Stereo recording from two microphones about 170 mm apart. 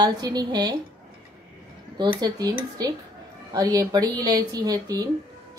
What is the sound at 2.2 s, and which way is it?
Speech, 25° right (ahead or behind).